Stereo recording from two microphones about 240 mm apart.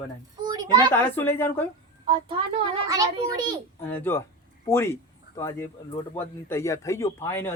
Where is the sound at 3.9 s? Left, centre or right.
Centre.